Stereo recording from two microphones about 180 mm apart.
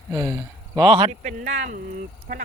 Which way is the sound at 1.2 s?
45° right (ahead or behind).